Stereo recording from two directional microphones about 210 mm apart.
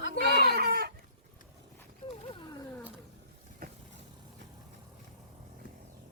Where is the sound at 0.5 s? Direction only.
50° right (ahead or behind).